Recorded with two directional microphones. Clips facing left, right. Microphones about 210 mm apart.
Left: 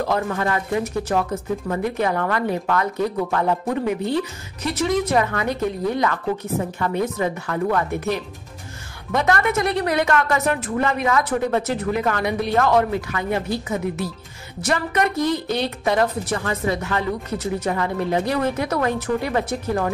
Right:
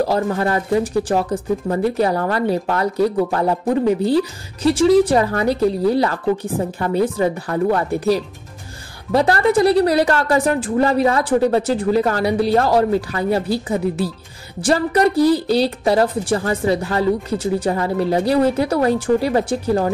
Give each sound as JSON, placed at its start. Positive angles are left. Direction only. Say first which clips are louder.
{"t": 0.0, "sound": "speech", "louder": "right 4 dB", "side_deg": -35}